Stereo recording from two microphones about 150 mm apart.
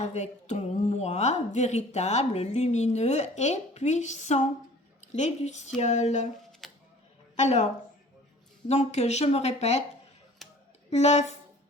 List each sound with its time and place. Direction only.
0.0 s a woman's voice: 50° left (ahead or behind)
6.6 s music: centre (ahead or behind)
7.3 s a woman's voice: 50° left (ahead or behind)
10.8 s a woman's voice: 45° left (ahead or behind)